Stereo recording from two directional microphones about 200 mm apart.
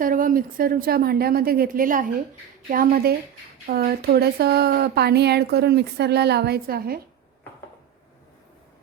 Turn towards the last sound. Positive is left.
turn(degrees=-50)  # may be behind; listen again after turning